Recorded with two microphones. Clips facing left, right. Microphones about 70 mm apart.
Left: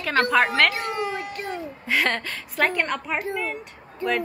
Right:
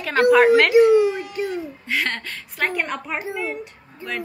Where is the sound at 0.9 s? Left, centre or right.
Left.